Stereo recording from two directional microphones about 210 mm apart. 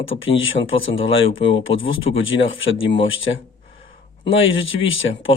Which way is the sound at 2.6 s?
65° left (ahead or behind).